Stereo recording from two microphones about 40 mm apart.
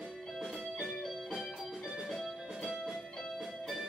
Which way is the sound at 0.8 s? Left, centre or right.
Centre.